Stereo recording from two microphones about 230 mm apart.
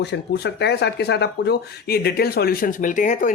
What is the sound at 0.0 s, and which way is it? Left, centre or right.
Speech, left.